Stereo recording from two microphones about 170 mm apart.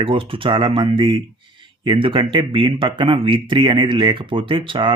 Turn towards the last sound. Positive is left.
turn(degrees=-30)  # may be behind; listen again after turning